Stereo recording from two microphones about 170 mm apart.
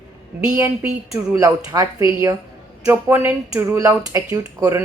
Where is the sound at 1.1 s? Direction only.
15° right (ahead or behind).